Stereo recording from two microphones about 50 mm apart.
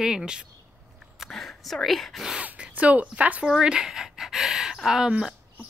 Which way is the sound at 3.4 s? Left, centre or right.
Centre.